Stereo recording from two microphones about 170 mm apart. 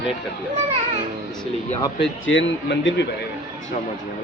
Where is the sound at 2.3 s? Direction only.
90° left.